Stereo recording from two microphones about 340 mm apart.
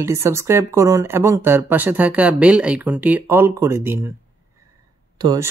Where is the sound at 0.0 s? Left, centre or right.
Centre.